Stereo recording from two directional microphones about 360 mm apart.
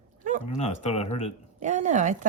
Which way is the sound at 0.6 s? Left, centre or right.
Centre.